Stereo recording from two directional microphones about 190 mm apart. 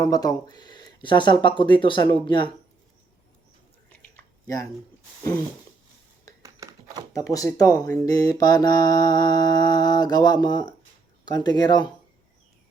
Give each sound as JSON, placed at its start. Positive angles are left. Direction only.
{"t": 0.0, "sound": "speech", "side_deg": 20}
{"t": 6.4, "sound": "a sound", "side_deg": -15}
{"t": 7.1, "sound": "speech", "side_deg": 20}